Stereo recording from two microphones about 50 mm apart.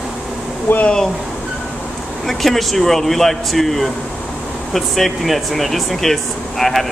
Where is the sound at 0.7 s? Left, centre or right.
Left.